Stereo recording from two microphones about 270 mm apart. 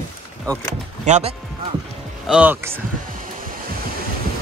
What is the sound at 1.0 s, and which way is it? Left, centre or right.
Speech, right.